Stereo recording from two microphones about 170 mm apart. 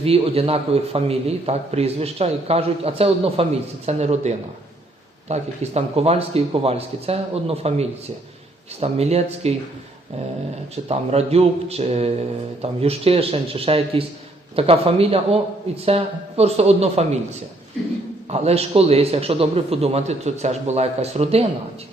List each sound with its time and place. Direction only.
0.0 s a man's voice: 35° right (ahead or behind)
10.8 s a man's voice: 40° right (ahead or behind)
18.3 s a man's voice: 35° right (ahead or behind)